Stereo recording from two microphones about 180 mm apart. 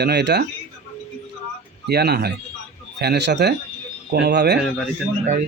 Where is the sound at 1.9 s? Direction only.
60° right (ahead or behind).